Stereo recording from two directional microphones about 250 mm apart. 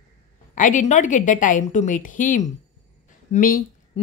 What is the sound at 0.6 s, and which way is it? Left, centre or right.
A woman's voice, left.